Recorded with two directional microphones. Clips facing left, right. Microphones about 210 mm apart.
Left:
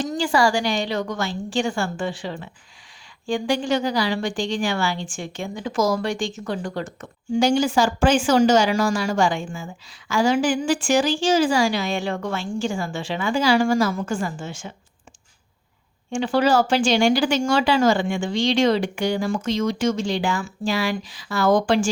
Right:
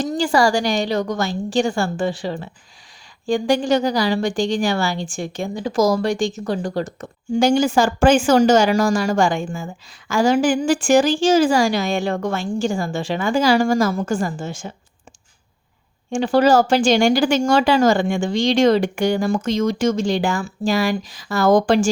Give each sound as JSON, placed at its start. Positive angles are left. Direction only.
{"t": 0.0, "sound": "a woman's voice", "side_deg": -40}
{"t": 16.0, "sound": "speech", "side_deg": -40}